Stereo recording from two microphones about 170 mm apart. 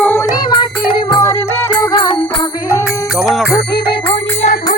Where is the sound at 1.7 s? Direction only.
25° left (ahead or behind).